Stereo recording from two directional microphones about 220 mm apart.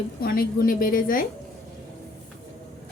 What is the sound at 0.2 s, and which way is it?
Speech, 40° left (ahead or behind).